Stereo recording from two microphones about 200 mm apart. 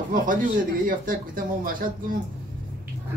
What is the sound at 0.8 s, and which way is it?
Speech, 45° right (ahead or behind).